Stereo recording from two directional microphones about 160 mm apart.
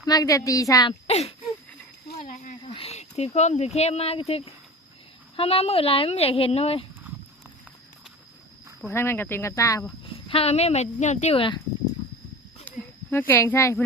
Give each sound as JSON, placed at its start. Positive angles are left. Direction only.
{"t": 0.0, "sound": "a woman's voice", "side_deg": 25}
{"t": 1.0, "sound": "speech", "side_deg": 40}
{"t": 2.2, "sound": "a sound", "side_deg": 50}
{"t": 2.7, "sound": "speech", "side_deg": 40}
{"t": 8.9, "sound": "speech", "side_deg": 15}
{"t": 10.0, "sound": "speech", "side_deg": 35}
{"t": 11.3, "sound": "speech", "side_deg": 30}
{"t": 12.6, "sound": "a sound", "side_deg": 15}